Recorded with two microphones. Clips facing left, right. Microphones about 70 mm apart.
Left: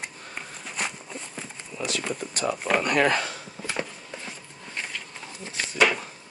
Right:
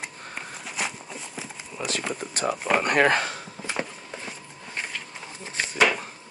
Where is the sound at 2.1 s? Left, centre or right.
Right.